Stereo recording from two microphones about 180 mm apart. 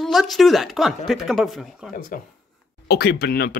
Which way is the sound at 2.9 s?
60° left (ahead or behind).